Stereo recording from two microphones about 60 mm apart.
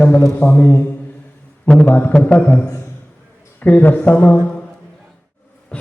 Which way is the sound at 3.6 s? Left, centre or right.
Left.